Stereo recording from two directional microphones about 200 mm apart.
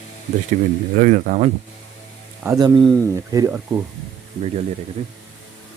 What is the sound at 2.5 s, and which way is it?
Speech, 20° right (ahead or behind).